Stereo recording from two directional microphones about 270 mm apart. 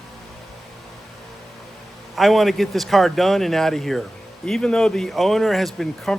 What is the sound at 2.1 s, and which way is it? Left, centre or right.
Speech, centre.